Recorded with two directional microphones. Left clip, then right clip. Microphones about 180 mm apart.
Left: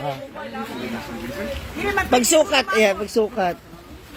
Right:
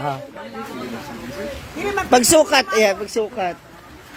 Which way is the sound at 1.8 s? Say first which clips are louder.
Right 3 dB; 25° right (ahead or behind).